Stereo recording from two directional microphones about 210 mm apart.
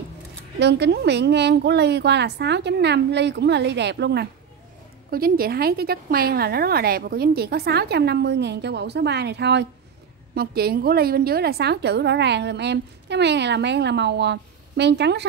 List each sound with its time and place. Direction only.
0.6 s a woman's voice: 55° right (ahead or behind)